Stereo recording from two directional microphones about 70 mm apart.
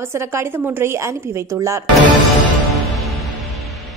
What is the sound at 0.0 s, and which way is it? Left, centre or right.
Speech, right.